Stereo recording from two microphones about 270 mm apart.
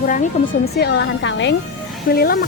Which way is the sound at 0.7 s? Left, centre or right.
Left.